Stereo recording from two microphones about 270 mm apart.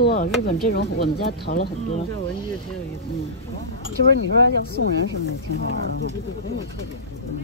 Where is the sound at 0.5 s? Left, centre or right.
Left.